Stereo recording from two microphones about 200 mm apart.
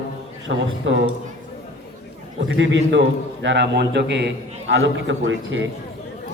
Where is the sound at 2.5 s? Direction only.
65° right (ahead or behind).